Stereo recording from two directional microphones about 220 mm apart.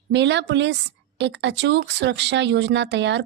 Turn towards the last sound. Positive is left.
turn(degrees=-55)  # may be behind; listen again after turning